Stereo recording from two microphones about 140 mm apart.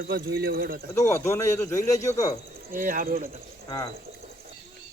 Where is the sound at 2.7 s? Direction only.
80° right.